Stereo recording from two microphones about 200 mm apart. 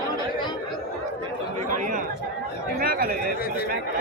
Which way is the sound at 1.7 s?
40° right (ahead or behind).